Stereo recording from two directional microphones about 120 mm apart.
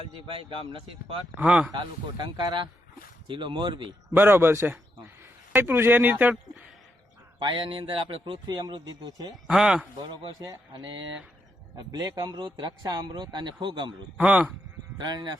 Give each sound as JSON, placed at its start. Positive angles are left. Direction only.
{"t": 0.3, "sound": "speech", "side_deg": -50}
{"t": 1.4, "sound": "speech", "side_deg": -10}
{"t": 1.8, "sound": "speech", "side_deg": -40}
{"t": 4.1, "sound": "speech", "side_deg": -20}
{"t": 7.3, "sound": "speech", "side_deg": -45}
{"t": 9.3, "sound": "speech", "side_deg": -5}
{"t": 10.7, "sound": "speech", "side_deg": -40}
{"t": 14.2, "sound": "speech", "side_deg": -10}
{"t": 14.9, "sound": "speech", "side_deg": -35}